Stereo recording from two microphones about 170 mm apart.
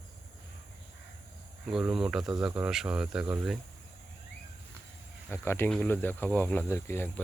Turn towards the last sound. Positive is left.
turn(degrees=15)  # may be behind; listen again after turning